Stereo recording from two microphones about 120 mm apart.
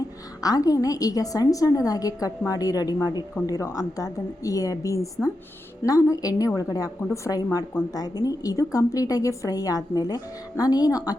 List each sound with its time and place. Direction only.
0.4 s a woman's voice: 30° left (ahead or behind)